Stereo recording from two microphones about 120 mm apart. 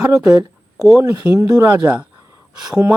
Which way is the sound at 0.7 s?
Centre (ahead or behind).